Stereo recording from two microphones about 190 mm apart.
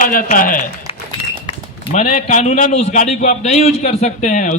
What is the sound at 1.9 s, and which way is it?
A man's voice, 40° left (ahead or behind).